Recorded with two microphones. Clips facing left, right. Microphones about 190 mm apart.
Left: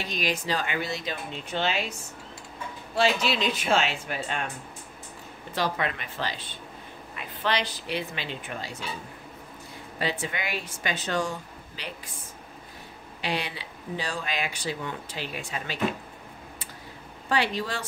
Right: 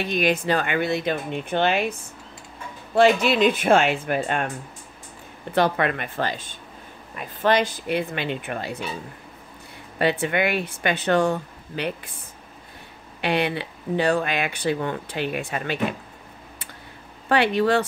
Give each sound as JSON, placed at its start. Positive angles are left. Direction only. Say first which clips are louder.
{"t": 0.0, "sound": "speech", "louder": "right 8 dB", "side_deg": -55}
{"t": 5.5, "sound": "speech", "louder": "right 7 dB", "side_deg": -60}
{"t": 9.9, "sound": "speech", "louder": "right 9 dB", "side_deg": -60}
{"t": 13.2, "sound": "speech", "louder": "right 8 dB", "side_deg": -60}
{"t": 17.3, "sound": "speech", "louder": "right 8 dB", "side_deg": -60}